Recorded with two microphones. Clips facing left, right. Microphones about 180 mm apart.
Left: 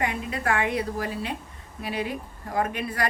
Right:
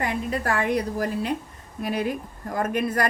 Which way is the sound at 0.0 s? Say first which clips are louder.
Right 2 dB; 40° right (ahead or behind).